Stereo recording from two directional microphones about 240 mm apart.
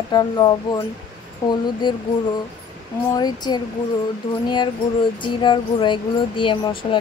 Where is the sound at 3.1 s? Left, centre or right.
Centre.